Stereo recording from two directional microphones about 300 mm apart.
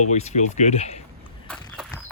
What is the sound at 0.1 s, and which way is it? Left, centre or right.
Speech, left.